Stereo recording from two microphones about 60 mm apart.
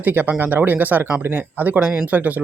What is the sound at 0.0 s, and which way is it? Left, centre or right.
Speech, right.